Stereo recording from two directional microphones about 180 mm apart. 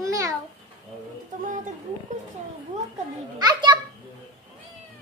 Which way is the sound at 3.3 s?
25° right (ahead or behind).